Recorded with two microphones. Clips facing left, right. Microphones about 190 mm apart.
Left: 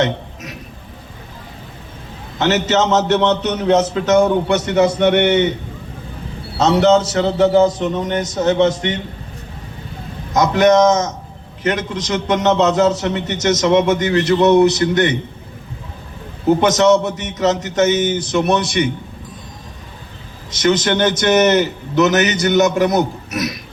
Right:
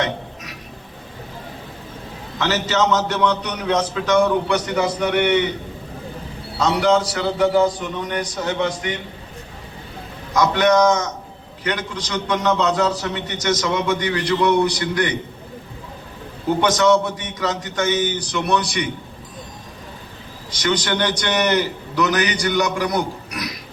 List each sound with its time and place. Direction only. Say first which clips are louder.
2.4 s a man's voice: left 4 dB; 25° left (ahead or behind)
6.7 s a man's voice: left 5 dB; 25° left (ahead or behind)
10.3 s a man's voice: left 4 dB; 25° left (ahead or behind)
16.5 s a man's voice: left 4 dB; 25° left (ahead or behind)
20.5 s a man's voice: left 6 dB; 25° left (ahead or behind)